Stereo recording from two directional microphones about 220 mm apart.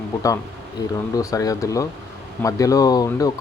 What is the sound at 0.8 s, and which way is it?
Speech, 15° left (ahead or behind).